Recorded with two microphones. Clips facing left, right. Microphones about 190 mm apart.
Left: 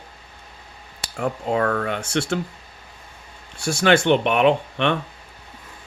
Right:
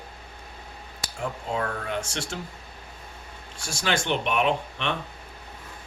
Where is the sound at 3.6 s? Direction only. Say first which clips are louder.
Left 10 dB; 60° left (ahead or behind).